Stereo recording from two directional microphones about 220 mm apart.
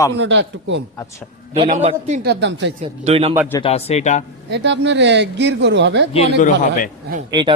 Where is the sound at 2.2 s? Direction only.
50° right (ahead or behind).